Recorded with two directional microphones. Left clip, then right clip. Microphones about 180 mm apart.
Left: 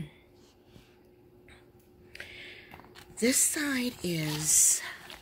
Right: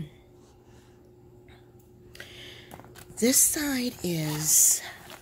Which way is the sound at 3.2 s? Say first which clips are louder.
Right 3 dB; 10° right (ahead or behind).